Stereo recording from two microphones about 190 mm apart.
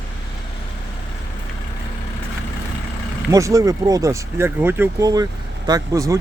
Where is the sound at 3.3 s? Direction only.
15° right (ahead or behind).